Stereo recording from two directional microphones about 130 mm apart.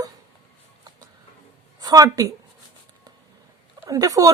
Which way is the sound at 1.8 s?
30° right (ahead or behind).